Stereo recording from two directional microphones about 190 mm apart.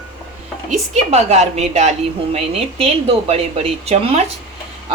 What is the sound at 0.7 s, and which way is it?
Speech, 35° right (ahead or behind).